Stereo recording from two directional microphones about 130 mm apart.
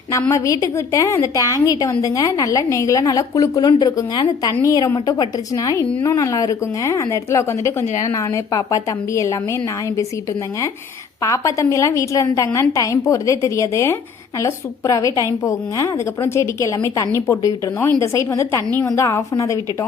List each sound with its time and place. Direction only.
0.3 s a woman's voice: 25° left (ahead or behind)
11.2 s a woman's voice: 25° left (ahead or behind)